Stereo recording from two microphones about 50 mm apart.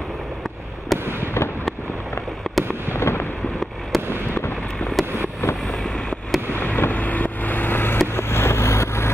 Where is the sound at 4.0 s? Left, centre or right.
Right.